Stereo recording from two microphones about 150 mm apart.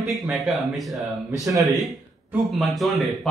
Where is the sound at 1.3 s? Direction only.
20° right (ahead or behind).